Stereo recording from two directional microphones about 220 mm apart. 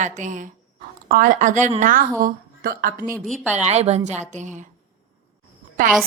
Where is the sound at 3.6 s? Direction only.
30° right (ahead or behind).